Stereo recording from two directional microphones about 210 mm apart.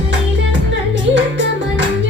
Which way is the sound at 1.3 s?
60° right (ahead or behind).